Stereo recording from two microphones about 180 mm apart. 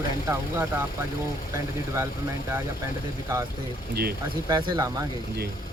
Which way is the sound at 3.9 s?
60° right (ahead or behind).